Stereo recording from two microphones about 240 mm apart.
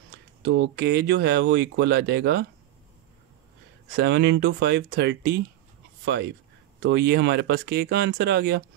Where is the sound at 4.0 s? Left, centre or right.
Right.